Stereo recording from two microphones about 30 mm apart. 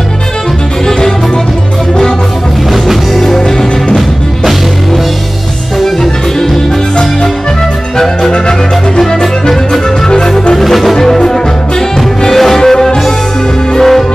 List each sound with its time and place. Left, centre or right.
3.3 s music: centre
8.3 s music: left
9.0 s music: centre
10.6 s music: centre
11.0 s music: centre
13.7 s music: centre